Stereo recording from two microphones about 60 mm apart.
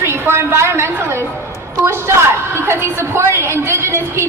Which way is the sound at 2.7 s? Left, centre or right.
Right.